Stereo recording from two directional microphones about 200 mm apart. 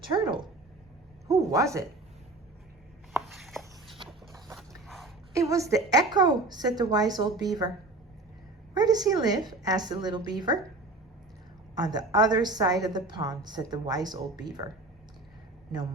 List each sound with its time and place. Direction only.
0.1 s a sound: 15° right (ahead or behind)
1.3 s a woman's voice: 15° right (ahead or behind)
3.1 s a sound: centre (ahead or behind)
4.9 s dog: centre (ahead or behind)
5.3 s a woman's voice: 15° right (ahead or behind)
8.7 s a woman's voice: 20° right (ahead or behind)
11.7 s a woman's voice: 20° right (ahead or behind)